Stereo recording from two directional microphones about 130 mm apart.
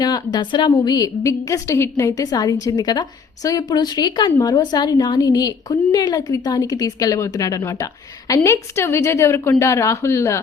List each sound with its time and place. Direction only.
0.0 s a woman's voice: 30° left (ahead or behind)